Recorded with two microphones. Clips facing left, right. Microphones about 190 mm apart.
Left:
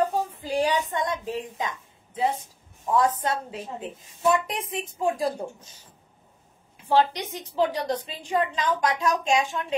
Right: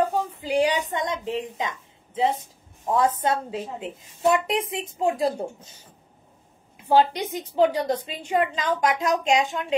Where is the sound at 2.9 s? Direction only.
25° right (ahead or behind).